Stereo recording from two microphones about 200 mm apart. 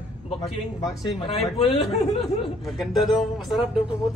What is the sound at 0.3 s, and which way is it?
A man's voice, 20° left (ahead or behind).